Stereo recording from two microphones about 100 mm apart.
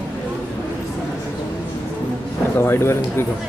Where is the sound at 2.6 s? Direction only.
25° left (ahead or behind).